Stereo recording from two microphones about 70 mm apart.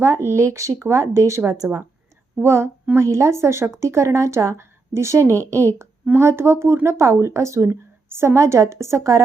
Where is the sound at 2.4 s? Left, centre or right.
Right.